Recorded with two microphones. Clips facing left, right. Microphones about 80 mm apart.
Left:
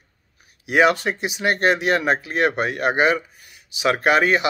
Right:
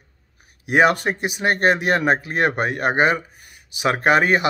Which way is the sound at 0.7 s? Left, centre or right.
Right.